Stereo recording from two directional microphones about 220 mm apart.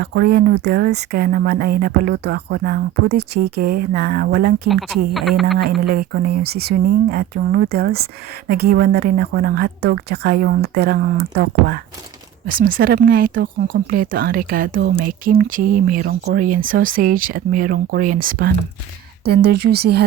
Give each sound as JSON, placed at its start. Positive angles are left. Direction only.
{"t": 0.0, "sound": "speech", "side_deg": -50}
{"t": 4.7, "sound": "a woman's voice", "side_deg": 0}
{"t": 5.8, "sound": "speech", "side_deg": -45}